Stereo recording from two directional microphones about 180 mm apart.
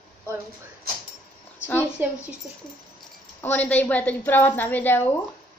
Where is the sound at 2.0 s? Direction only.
10° right (ahead or behind).